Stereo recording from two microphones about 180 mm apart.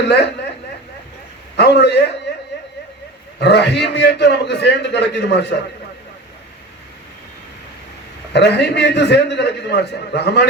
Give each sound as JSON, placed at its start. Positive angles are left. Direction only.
{"t": 0.0, "sound": "a man's voice", "side_deg": 70}
{"t": 1.5, "sound": "a man's voice", "side_deg": 65}
{"t": 3.4, "sound": "a man's voice", "side_deg": 65}
{"t": 8.3, "sound": "a man's voice", "side_deg": 65}